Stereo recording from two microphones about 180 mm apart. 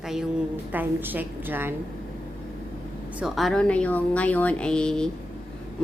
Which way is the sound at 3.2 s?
Centre (ahead or behind).